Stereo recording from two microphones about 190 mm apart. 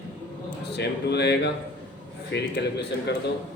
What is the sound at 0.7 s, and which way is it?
A man's voice, 60° left (ahead or behind).